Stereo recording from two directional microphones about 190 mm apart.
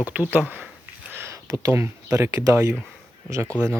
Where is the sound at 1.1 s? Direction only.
15° right (ahead or behind).